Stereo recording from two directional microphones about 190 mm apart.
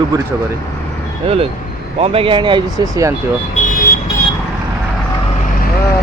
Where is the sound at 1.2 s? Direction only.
30° right (ahead or behind).